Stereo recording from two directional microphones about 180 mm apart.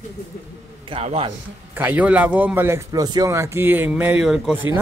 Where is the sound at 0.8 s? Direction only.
35° right (ahead or behind).